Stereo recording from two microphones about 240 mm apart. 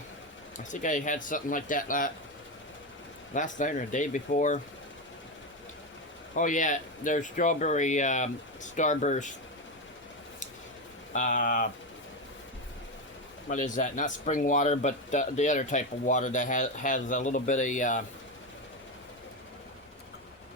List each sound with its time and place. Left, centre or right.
0.6 s speech: left
3.3 s speech: left
6.3 s speech: left
11.1 s speech: left
13.5 s speech: left